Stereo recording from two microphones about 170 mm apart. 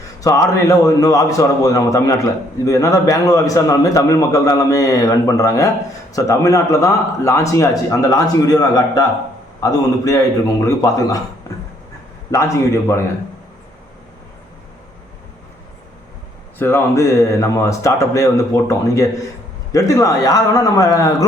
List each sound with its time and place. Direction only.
0.2 s a man's voice: 20° left (ahead or behind)
12.3 s speech: 15° left (ahead or behind)
16.6 s a man's voice: 15° left (ahead or behind)